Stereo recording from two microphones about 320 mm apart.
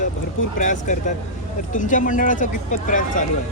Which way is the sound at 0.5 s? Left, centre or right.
Left.